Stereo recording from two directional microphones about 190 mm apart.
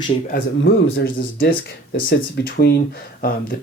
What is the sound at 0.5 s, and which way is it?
Speech, 75° left (ahead or behind).